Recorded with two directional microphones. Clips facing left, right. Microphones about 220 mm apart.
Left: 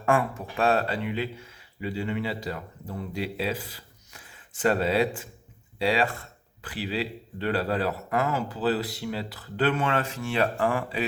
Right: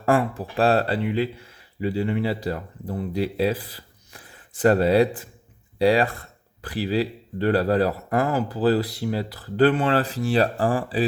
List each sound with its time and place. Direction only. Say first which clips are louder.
0.0 s speech: right 4 dB; 35° right (ahead or behind)